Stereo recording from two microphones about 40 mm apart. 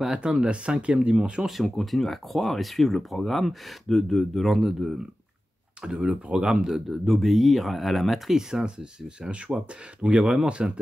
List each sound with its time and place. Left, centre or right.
0.0 s speech: centre
1.6 s speech: centre
4.6 s speech: centre
6.0 s speech: right
6.7 s speech: centre; by 10.7 s right